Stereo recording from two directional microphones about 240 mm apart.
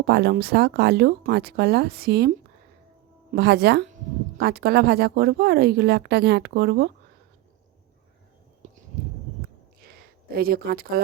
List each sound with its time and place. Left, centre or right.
0.0 s speech: right
3.3 s speech: right
8.6 s a sound: right
10.3 s speech: right